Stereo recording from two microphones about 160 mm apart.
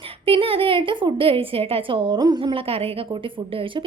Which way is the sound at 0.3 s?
35° right (ahead or behind).